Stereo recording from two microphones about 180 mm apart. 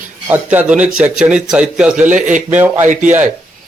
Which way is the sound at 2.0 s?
45° right (ahead or behind).